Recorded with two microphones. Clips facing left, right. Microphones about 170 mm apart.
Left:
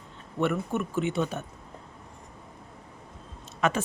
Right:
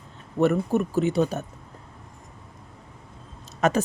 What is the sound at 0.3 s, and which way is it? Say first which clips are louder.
A woman's voice: right 6 dB; 40° right (ahead or behind).